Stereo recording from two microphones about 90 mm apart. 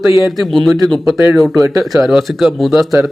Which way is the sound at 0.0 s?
Centre (ahead or behind).